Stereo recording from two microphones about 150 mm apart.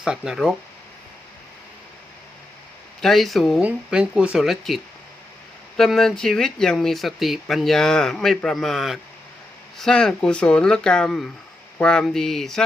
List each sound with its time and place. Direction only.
0.0 s speech: 5° right (ahead or behind)
3.0 s speech: centre (ahead or behind)